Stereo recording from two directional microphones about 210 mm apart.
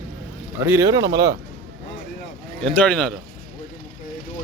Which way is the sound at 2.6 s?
5° left (ahead or behind).